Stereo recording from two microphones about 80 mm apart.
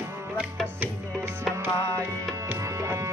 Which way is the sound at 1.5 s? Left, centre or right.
Right.